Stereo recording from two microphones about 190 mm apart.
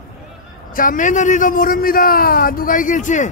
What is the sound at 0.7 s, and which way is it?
A man's voice, 45° left (ahead or behind).